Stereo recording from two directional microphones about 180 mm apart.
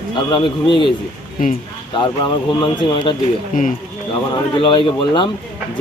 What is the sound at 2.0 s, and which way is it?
Speech, 25° left (ahead or behind).